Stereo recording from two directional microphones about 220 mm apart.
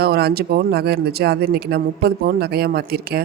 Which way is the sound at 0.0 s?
45° right (ahead or behind).